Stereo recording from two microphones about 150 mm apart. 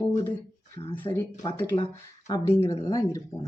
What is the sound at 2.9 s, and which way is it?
Speech, 20° left (ahead or behind).